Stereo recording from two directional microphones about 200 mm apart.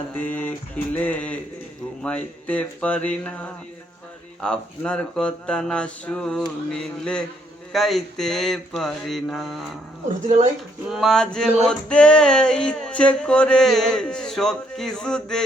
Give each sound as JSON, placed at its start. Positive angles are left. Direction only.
{"t": 0.2, "sound": "a sound", "side_deg": 10}
{"t": 0.9, "sound": "speech", "side_deg": 10}
{"t": 4.4, "sound": "music", "side_deg": 5}
{"t": 10.2, "sound": "speech", "side_deg": -35}
{"t": 10.8, "sound": "music", "side_deg": 0}